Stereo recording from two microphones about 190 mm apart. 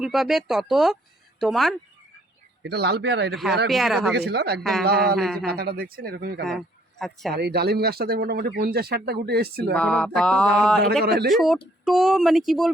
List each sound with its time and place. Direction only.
0.0 s mantra: centre (ahead or behind)
2.6 s speech: 60° right (ahead or behind)
3.7 s mantra: centre (ahead or behind)
4.1 s speech: 60° right (ahead or behind)
4.6 s mantra: centre (ahead or behind)
5.5 s speech: 55° right (ahead or behind)
7.0 s mantra: centre (ahead or behind)
7.3 s speech: 55° right (ahead or behind)
9.7 s mantra: 5° left (ahead or behind)
11.0 s speech: 55° right (ahead or behind)
11.3 s mantra: centre (ahead or behind)